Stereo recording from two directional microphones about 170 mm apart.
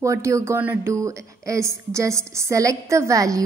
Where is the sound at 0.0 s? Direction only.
15° right (ahead or behind).